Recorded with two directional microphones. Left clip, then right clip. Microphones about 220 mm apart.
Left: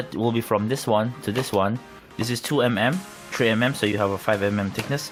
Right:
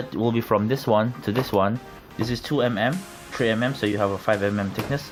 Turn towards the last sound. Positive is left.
turn(degrees=20)  # may be behind; listen again after turning